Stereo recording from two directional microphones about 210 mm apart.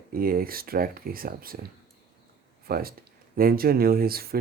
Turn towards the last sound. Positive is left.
turn(degrees=-45)  # may be behind; listen again after turning